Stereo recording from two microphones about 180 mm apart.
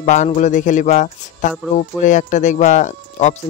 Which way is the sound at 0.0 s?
40° left (ahead or behind).